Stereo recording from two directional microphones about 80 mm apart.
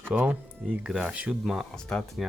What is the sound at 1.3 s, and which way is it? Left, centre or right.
Speech, centre.